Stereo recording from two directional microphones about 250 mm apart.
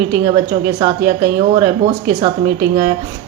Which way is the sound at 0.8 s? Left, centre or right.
Centre.